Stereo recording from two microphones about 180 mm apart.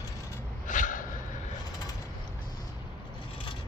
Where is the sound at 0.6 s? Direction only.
45° left (ahead or behind).